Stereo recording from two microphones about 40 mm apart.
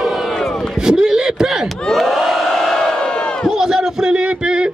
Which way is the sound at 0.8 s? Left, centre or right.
Centre.